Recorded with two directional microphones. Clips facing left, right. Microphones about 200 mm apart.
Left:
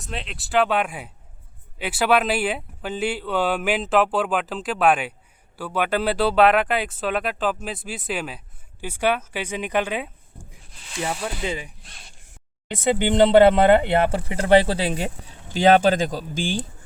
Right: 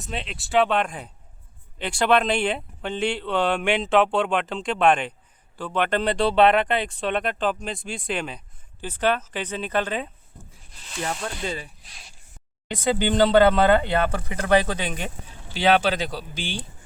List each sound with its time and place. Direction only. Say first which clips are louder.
0.0 s a woman's voice: right 1 dB; centre (ahead or behind)
11.8 s speech: left 2 dB; centre (ahead or behind)
12.9 s speech: left 3 dB; 25° left (ahead or behind); by 16.6 s 45° left (ahead or behind)